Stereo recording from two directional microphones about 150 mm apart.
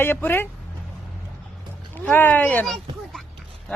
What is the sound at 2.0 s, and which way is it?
Speech, 15° left (ahead or behind).